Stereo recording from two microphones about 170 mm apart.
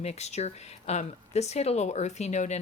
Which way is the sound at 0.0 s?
40° left (ahead or behind).